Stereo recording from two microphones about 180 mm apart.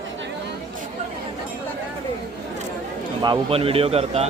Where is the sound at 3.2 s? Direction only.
30° right (ahead or behind).